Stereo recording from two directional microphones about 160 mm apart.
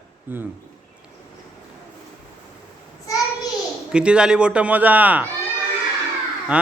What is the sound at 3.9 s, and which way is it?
A man's voice, 5° right (ahead or behind).